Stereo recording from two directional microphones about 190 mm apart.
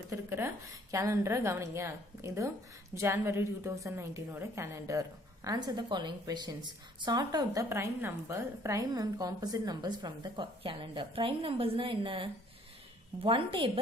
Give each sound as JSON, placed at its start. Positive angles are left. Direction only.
{"t": 0.1, "sound": "a woman's voice", "side_deg": -15}